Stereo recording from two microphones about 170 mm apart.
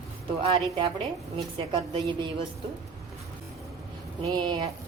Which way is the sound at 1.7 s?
25° right (ahead or behind).